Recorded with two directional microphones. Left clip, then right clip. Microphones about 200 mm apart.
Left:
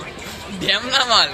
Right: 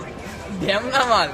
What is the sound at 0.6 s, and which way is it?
Speech, 25° right (ahead or behind).